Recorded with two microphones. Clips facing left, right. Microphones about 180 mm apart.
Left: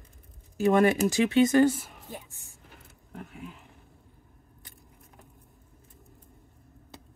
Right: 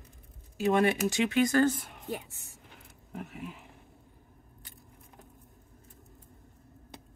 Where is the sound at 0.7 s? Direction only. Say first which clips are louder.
Left 4 dB; 40° left (ahead or behind).